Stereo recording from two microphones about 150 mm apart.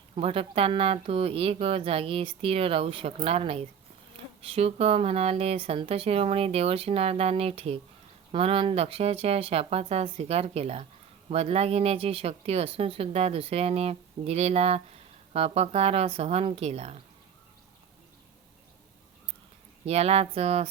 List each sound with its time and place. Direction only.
0.2 s speech: 40° right (ahead or behind)
19.8 s speech: 45° right (ahead or behind)